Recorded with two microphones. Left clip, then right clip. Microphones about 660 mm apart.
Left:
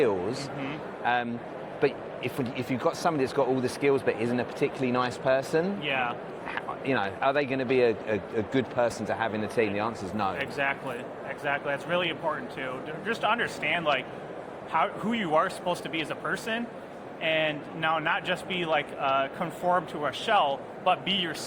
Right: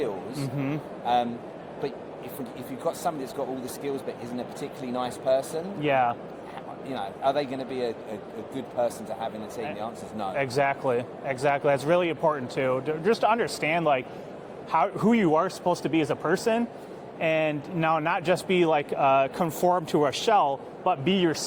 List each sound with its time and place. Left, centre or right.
1.0 s speech: left
2.4 s speech: left
5.8 s a man's voice: right
6.8 s speech: left
10.3 s a man's voice: right